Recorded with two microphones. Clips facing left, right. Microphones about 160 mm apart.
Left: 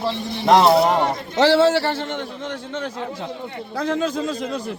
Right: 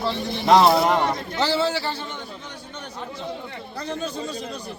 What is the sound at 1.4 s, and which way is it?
A man's voice, 85° left.